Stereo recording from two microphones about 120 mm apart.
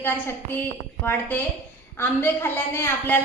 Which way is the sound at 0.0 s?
15° left (ahead or behind).